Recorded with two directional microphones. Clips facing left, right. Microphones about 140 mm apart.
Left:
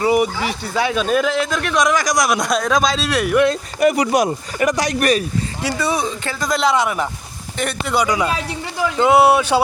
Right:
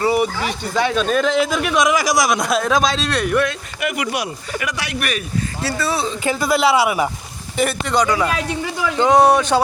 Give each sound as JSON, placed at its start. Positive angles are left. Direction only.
{"t": 0.0, "sound": "speech", "side_deg": 15}
{"t": 3.4, "sound": "speech", "side_deg": 35}
{"t": 5.6, "sound": "speech", "side_deg": 15}
{"t": 6.2, "sound": "speech", "side_deg": -10}
{"t": 7.6, "sound": "speech", "side_deg": 5}